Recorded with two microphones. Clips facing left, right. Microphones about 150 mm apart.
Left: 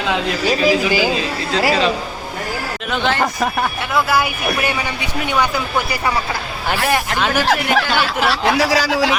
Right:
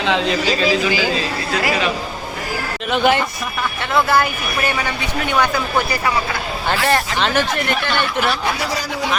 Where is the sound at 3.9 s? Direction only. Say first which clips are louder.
Right 2 dB; 5° left (ahead or behind).